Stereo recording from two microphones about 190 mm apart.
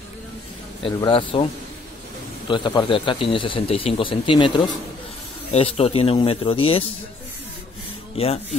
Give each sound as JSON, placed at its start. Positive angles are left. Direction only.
{"t": 0.8, "sound": "speech", "side_deg": 30}
{"t": 2.5, "sound": "speech", "side_deg": 20}
{"t": 8.2, "sound": "speech", "side_deg": 30}